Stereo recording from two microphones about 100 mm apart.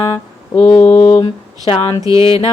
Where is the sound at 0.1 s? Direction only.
55° left (ahead or behind).